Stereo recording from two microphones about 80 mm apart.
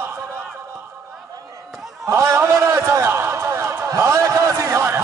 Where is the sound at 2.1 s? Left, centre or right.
Right.